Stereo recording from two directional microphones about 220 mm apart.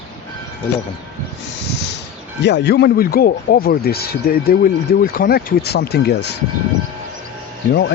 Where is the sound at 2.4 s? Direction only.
50° left (ahead or behind).